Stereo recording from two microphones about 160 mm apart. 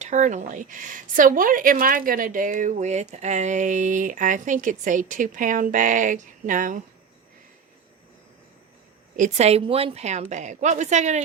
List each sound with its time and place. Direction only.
0.0 s speech: 50° right (ahead or behind)
9.1 s speech: 50° right (ahead or behind)